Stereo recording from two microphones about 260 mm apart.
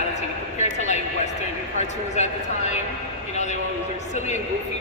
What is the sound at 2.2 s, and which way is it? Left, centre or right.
Speech, left.